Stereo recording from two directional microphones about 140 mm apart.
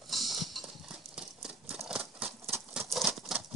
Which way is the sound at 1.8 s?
5° right (ahead or behind).